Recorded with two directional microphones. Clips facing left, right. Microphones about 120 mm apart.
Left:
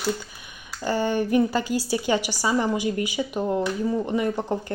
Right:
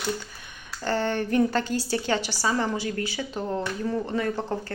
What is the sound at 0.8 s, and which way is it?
A woman's voice, 10° left (ahead or behind).